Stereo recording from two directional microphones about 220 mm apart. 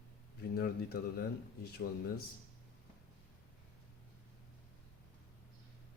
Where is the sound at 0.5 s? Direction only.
45° left (ahead or behind).